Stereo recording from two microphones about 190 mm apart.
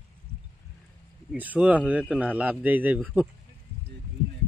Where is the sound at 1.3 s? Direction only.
5° right (ahead or behind).